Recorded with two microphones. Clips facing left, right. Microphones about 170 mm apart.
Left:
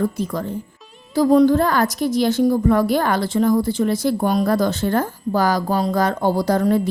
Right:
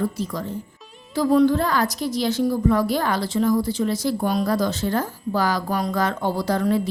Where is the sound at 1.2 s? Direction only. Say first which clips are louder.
Left 4 dB; 40° left (ahead or behind).